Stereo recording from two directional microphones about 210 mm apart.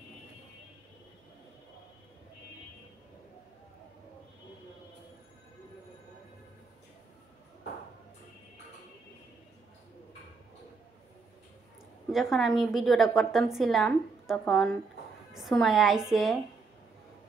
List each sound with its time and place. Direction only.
12.1 s a woman's voice: centre (ahead or behind)